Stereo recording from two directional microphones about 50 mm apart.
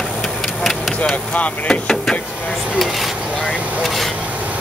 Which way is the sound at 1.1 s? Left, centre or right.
Left.